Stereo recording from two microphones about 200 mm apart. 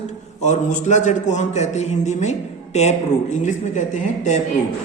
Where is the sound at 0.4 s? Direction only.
35° left (ahead or behind).